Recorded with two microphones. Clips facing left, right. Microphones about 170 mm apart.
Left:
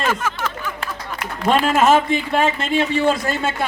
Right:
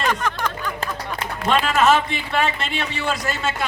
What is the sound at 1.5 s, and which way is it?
A man's voice, 45° left (ahead or behind).